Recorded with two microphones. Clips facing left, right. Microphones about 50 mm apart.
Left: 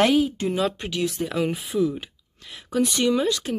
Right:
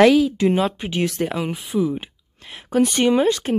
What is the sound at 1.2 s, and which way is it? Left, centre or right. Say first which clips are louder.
Speech: right 5 dB; right.